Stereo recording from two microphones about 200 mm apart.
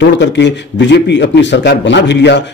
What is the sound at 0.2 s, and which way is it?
A man's voice, 60° left (ahead or behind).